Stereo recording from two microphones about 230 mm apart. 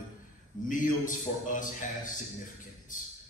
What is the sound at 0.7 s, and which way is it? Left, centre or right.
A man's voice, left.